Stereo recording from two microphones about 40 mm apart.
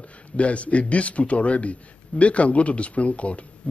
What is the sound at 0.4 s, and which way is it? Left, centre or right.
Speech, left.